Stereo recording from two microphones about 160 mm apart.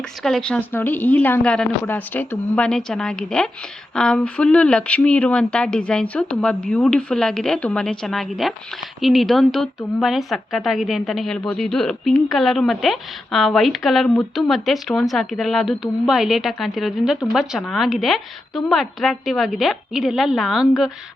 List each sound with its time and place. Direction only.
0.2 s speech: centre (ahead or behind)